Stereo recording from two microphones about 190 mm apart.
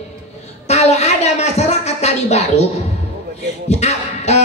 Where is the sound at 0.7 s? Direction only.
35° left (ahead or behind).